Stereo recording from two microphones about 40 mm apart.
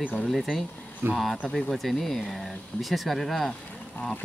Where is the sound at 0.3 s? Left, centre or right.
Centre.